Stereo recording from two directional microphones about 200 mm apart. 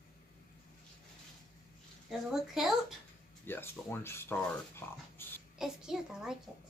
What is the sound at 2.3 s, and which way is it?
Speech, centre (ahead or behind).